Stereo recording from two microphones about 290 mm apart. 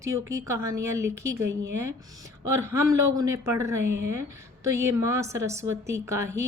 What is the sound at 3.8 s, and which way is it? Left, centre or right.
Speech, right.